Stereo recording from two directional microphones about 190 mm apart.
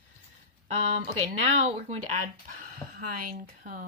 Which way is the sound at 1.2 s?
35° right (ahead or behind).